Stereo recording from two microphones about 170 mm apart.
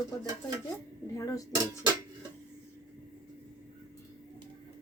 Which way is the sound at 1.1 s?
20° left (ahead or behind).